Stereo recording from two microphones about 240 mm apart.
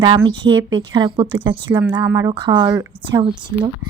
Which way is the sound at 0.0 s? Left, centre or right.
Centre.